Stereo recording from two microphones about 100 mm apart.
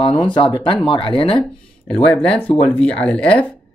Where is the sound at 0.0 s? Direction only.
55° left (ahead or behind).